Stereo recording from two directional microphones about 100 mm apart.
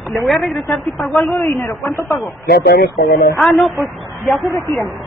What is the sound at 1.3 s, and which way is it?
Speech, 40° left (ahead or behind).